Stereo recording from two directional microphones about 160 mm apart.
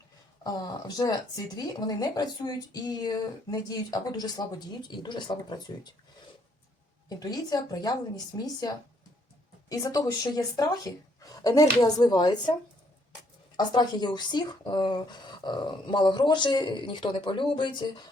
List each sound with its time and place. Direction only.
0.4 s speech: 25° left (ahead or behind)
7.1 s speech: 25° left (ahead or behind)
9.6 s speech: 20° left (ahead or behind)
13.6 s speech: 25° left (ahead or behind)